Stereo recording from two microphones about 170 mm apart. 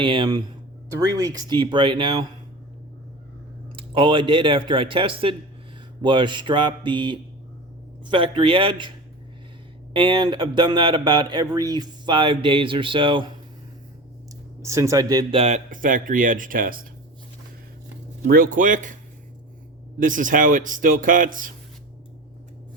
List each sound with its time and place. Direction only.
0.0 s speech: 30° right (ahead or behind)
3.8 s speech: 30° right (ahead or behind)
9.9 s speech: 30° right (ahead or behind)
14.6 s speech: 15° right (ahead or behind); by 16.8 s 55° right (ahead or behind)
18.3 s speech: 55° right (ahead or behind)
20.0 s speech: 50° right (ahead or behind)